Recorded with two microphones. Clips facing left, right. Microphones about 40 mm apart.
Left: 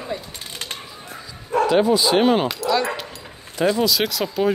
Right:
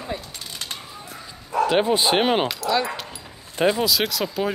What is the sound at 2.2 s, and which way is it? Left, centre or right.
Speech, right.